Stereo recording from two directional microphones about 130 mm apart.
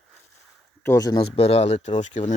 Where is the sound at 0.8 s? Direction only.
25° left (ahead or behind).